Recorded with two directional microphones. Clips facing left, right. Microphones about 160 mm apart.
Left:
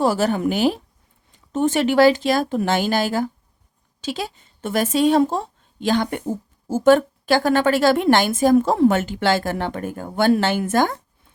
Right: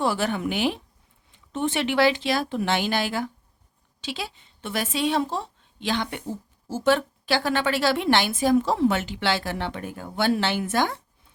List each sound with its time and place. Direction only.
0.0 s a woman's voice: 40° left (ahead or behind)